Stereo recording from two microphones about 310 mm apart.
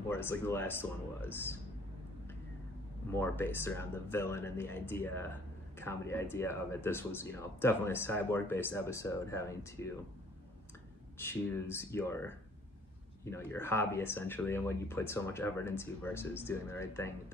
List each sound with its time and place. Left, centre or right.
0.1 s speech: centre
3.1 s speech: centre
11.1 s speech: centre